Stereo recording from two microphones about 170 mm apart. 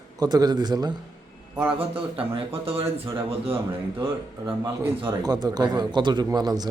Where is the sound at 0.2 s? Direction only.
25° right (ahead or behind).